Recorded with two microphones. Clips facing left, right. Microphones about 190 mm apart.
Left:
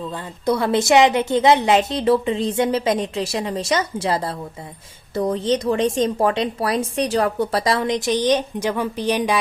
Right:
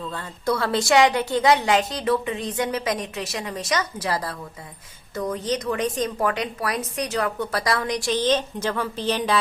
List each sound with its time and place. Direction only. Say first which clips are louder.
0.0 s a woman's voice: left 4 dB; 15° left (ahead or behind)